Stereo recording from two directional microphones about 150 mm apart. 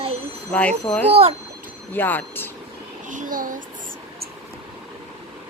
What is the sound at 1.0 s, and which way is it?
Speech, 40° right (ahead or behind).